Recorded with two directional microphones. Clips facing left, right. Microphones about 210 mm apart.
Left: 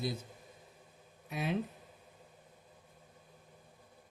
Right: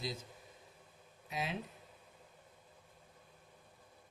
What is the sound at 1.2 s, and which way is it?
Speech, 60° left (ahead or behind).